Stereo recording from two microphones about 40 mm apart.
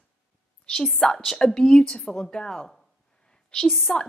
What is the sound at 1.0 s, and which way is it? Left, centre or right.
A woman's voice, centre.